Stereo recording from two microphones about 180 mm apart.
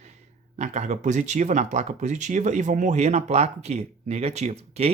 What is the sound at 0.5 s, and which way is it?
Speech, 40° right (ahead or behind).